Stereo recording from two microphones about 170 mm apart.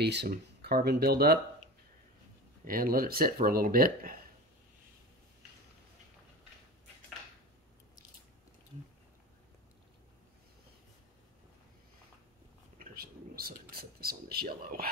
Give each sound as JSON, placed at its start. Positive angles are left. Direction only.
{"t": 0.0, "sound": "speech", "side_deg": -75}
{"t": 2.6, "sound": "speech", "side_deg": -55}
{"t": 12.7, "sound": "a sound", "side_deg": -60}